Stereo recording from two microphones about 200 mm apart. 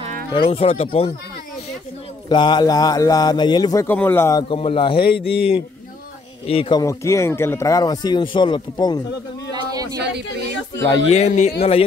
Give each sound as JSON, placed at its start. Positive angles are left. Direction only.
{"t": 0.3, "sound": "a man's voice", "side_deg": 25}
{"t": 2.2, "sound": "a man's voice", "side_deg": 20}
{"t": 9.5, "sound": "a sound", "side_deg": -20}
{"t": 11.1, "sound": "a man's voice", "side_deg": 35}